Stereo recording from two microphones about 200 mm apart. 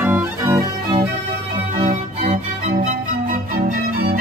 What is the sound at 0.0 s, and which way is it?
Music, 10° right (ahead or behind).